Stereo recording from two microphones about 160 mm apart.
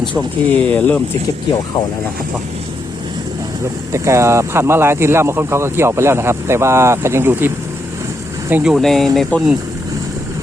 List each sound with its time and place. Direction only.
0.1 s speech: 10° left (ahead or behind)
3.9 s speech: 20° right (ahead or behind); by 9.6 s centre (ahead or behind)